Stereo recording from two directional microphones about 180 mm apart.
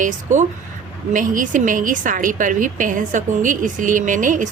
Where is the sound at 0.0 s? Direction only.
45° right (ahead or behind).